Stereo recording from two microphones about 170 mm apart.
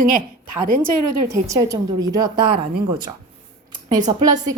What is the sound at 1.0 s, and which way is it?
A woman's voice, 20° right (ahead or behind).